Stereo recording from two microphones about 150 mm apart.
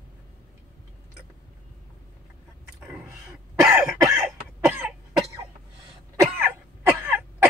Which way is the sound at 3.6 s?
5° right (ahead or behind).